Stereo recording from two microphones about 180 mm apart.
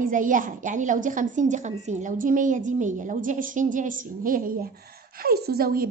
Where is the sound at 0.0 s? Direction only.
45° right (ahead or behind).